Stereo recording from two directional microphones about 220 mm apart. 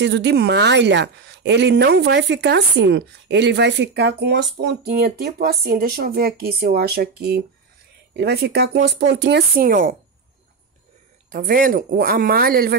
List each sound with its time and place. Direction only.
0.0 s speech: 50° right (ahead or behind)
11.3 s speech: 40° right (ahead or behind)